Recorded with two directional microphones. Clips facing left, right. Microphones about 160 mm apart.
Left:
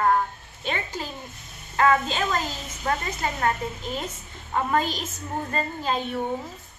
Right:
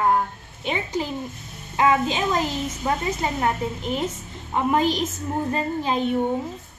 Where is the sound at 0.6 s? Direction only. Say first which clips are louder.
Right 5 dB; 15° right (ahead or behind).